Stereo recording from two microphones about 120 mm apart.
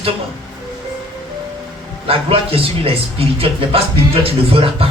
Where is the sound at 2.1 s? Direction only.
50° right (ahead or behind).